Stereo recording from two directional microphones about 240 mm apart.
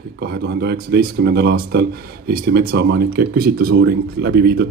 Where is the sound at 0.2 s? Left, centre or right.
Right.